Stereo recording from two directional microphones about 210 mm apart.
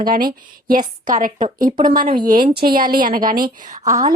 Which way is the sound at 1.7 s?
20° right (ahead or behind).